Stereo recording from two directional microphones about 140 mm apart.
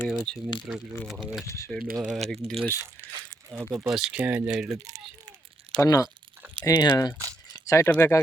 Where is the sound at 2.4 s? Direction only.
45° right (ahead or behind).